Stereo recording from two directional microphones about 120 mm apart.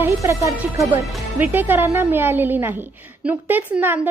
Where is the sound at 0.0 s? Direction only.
25° right (ahead or behind).